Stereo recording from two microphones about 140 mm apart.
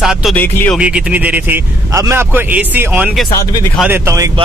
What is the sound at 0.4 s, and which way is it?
Speech, 15° left (ahead or behind).